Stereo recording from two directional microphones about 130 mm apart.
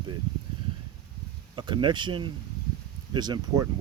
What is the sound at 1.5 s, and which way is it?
Speech, 35° right (ahead or behind).